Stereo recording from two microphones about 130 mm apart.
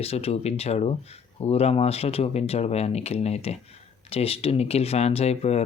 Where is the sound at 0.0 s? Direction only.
50° left (ahead or behind).